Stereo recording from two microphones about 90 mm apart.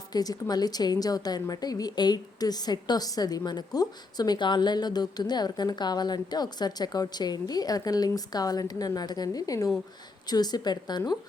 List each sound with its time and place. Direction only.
0.1 s a woman's voice: 45° left (ahead or behind)